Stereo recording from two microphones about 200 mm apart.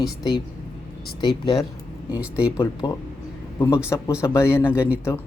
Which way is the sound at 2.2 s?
5° right (ahead or behind).